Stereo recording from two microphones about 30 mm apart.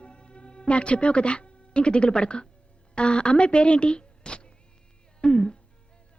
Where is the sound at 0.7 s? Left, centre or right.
Left.